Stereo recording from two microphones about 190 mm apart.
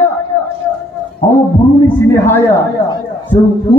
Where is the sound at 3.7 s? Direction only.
25° left (ahead or behind).